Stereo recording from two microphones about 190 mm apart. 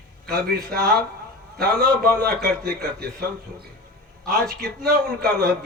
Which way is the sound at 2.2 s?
55° right (ahead or behind).